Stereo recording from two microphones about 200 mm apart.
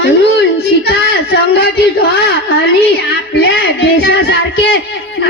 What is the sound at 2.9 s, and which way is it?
Music, 55° left (ahead or behind).